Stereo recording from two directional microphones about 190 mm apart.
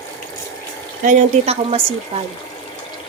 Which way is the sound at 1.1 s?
35° right (ahead or behind).